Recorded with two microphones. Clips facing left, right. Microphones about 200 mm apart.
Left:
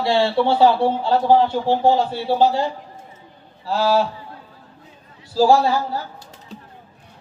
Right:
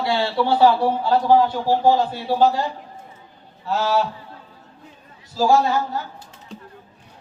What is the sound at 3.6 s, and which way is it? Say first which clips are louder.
Speech: left 3 dB; 30° left (ahead or behind).